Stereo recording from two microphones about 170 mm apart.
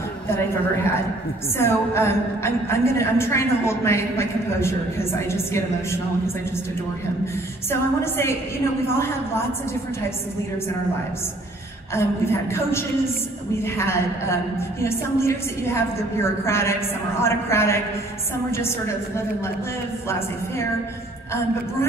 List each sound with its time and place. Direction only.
1.6 s a woman's voice: 15° left (ahead or behind)
8.0 s a woman's voice: 15° left (ahead or behind)
11.9 s a woman's voice: 15° left (ahead or behind)
20.1 s a woman's voice: 15° left (ahead or behind)